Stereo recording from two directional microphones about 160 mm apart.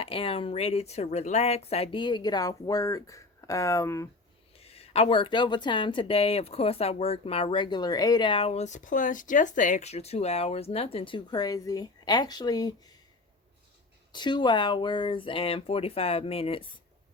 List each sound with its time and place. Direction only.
0.0 s a woman's voice: 35° left (ahead or behind); by 4.1 s 20° left (ahead or behind)
4.5 s a woman's voice: 40° left (ahead or behind)
14.1 s a woman's voice: 30° left (ahead or behind)